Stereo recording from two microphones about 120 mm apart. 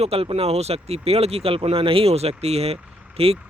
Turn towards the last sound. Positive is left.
turn(degrees=-55)  # may be behind; listen again after turning